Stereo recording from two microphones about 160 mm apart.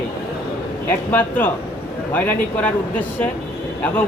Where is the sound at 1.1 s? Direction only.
10° left (ahead or behind).